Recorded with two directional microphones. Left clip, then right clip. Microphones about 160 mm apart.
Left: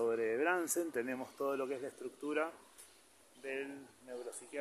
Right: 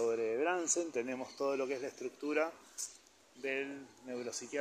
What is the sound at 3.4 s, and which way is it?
Speech, 25° right (ahead or behind).